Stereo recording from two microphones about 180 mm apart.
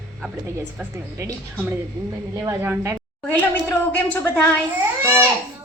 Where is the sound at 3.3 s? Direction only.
10° left (ahead or behind).